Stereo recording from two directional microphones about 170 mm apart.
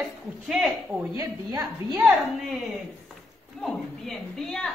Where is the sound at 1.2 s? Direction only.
25° right (ahead or behind).